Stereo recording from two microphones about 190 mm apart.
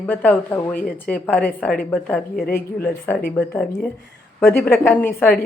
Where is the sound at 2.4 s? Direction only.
55° left (ahead or behind).